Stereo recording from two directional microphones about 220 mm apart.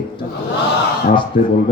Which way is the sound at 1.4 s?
40° left (ahead or behind).